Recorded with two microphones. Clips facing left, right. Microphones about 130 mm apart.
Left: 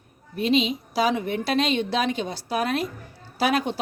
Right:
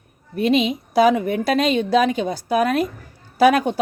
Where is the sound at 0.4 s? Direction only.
55° right (ahead or behind).